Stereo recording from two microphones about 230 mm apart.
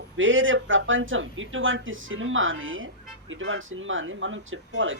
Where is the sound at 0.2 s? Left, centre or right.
Right.